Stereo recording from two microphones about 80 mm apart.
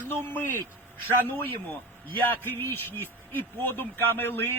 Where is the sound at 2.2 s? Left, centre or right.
Left.